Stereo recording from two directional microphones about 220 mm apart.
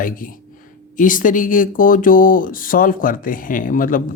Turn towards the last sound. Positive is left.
turn(degrees=40)  # may be behind; listen again after turning